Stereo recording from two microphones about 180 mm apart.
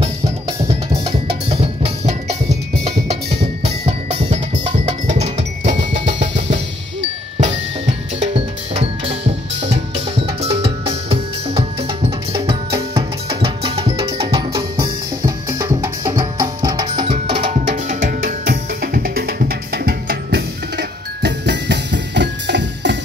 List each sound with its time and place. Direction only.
1.0 s music: 30° right (ahead or behind)
3.6 s music: 35° right (ahead or behind)
4.8 s percussion: 35° right (ahead or behind)
6.5 s drum: 40° right (ahead or behind)
12.3 s music: 25° right (ahead or behind)
14.5 s music: 20° right (ahead or behind); by 22.9 s 75° right (ahead or behind)